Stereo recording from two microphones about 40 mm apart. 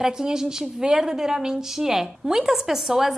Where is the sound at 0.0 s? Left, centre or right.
Centre.